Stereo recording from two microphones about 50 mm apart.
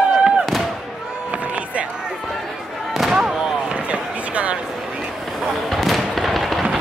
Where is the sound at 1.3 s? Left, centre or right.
Right.